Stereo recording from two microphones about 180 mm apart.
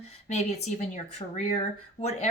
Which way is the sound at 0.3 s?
40° left (ahead or behind).